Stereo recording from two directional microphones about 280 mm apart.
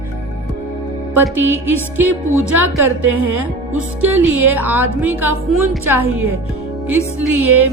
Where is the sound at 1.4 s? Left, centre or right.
Centre.